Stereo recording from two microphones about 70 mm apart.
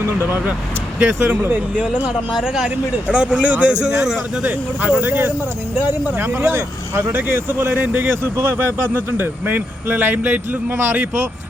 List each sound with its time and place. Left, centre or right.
0.9 s speech: right
2.3 s speech: centre
4.8 s speech: right